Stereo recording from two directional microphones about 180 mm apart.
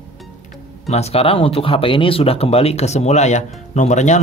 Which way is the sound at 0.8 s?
35° left (ahead or behind).